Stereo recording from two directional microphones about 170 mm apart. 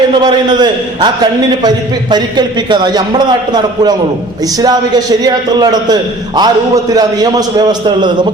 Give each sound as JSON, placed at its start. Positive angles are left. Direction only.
{"t": 0.2, "sound": "a man's voice", "side_deg": -25}